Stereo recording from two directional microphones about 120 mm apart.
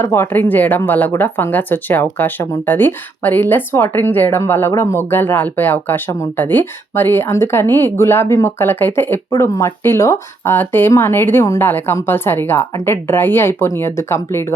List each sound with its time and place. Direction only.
0.0 s speech: 20° left (ahead or behind)